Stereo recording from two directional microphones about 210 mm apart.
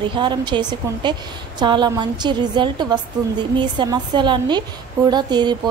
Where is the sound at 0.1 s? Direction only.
20° right (ahead or behind).